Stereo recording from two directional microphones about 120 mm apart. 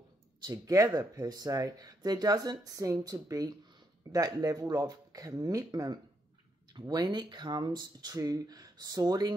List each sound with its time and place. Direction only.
0.4 s speech: 30° right (ahead or behind)